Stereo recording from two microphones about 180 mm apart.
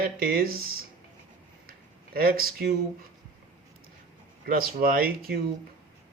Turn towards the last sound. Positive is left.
turn(degrees=-55)  # may be behind; listen again after turning